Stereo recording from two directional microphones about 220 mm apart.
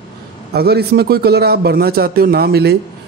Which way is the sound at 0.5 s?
45° right (ahead or behind).